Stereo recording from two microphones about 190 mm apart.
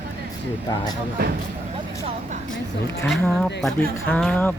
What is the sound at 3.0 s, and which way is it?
Speech, centre (ahead or behind).